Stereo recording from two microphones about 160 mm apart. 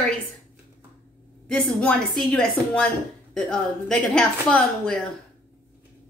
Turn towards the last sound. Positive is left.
turn(degrees=5)  # may be behind; listen again after turning